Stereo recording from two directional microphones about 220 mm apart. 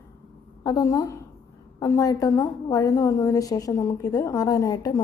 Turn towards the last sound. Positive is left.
turn(degrees=15)  # may be behind; listen again after turning